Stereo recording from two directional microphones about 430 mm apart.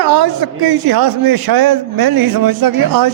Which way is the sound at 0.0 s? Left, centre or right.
Right.